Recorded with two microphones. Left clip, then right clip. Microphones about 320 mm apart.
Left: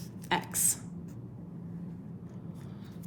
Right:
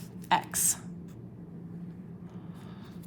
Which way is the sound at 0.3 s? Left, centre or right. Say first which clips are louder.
Right 4 dB; right.